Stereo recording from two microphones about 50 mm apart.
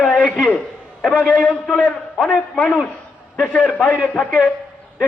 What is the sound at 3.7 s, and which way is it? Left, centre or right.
Speech, centre.